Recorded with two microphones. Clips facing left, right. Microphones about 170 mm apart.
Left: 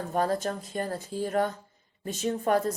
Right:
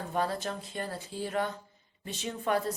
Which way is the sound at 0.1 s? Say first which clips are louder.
Left 4 dB; 45° left (ahead or behind).